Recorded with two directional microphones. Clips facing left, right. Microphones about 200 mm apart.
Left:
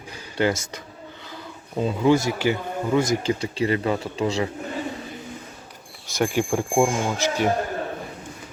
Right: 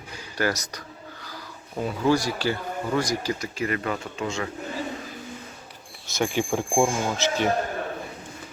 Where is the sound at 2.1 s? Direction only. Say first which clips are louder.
Left 3 dB; 20° left (ahead or behind).